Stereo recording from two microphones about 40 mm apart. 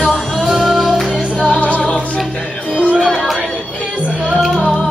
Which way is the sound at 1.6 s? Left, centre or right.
Left.